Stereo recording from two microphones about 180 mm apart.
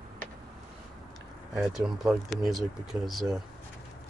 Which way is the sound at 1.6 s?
Centre (ahead or behind).